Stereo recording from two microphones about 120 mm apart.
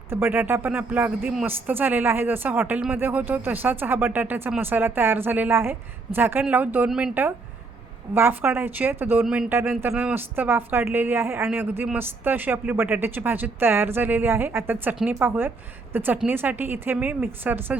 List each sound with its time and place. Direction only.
0.1 s a woman's voice: 15° right (ahead or behind)
9.2 s speech: 5° right (ahead or behind)
9.5 s a woman's voice: 20° right (ahead or behind)